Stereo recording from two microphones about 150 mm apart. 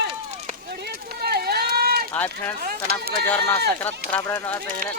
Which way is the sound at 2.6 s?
90° right.